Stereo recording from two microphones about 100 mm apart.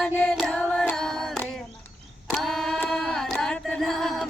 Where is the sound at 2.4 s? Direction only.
5° left (ahead or behind).